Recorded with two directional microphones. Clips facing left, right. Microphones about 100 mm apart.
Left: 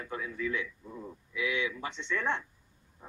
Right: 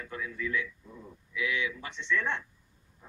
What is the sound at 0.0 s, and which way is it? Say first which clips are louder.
Speech: left 1 dB; 25° left (ahead or behind).